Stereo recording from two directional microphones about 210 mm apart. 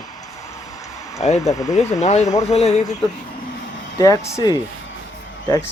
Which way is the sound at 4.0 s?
15° left (ahead or behind).